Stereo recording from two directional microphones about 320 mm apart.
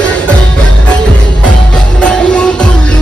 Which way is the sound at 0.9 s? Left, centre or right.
Centre.